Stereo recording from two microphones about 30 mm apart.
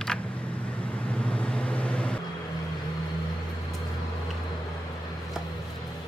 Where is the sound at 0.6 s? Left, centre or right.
Left.